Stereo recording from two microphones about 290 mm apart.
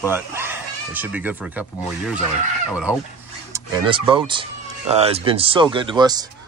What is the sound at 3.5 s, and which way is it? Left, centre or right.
Speech, centre.